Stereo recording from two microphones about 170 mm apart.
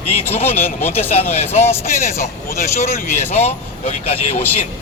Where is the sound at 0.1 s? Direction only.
35° left (ahead or behind).